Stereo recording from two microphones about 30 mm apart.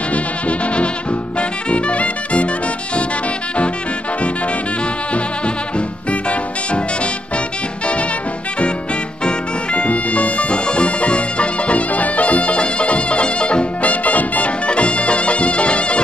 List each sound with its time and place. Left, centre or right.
0.1 s insect: left
1.7 s music: left
5.8 s music: left
9.8 s music: left
10.5 s music: left
13.8 s music: left
14.7 s music: left